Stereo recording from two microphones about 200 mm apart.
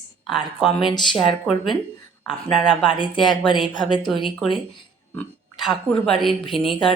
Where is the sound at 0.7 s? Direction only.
25° left (ahead or behind).